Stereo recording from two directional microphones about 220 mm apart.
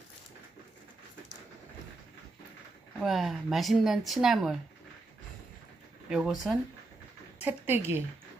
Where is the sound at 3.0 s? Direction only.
Centre (ahead or behind).